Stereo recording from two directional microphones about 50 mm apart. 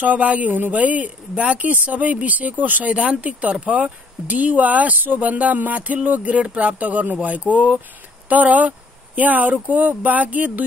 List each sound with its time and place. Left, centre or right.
0.0 s a woman's voice: right